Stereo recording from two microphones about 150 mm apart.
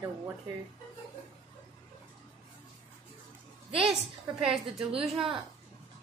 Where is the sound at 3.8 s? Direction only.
5° right (ahead or behind).